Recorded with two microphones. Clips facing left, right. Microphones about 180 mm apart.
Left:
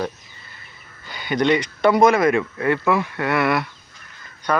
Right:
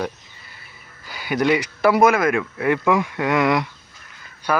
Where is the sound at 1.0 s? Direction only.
5° right (ahead or behind).